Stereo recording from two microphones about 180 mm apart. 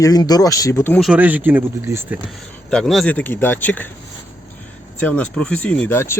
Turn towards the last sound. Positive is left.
turn(degrees=10)  # may be behind; listen again after turning